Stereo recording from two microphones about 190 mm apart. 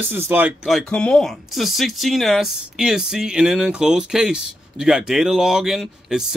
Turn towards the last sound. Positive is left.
turn(degrees=0)  # may be behind; listen again after turning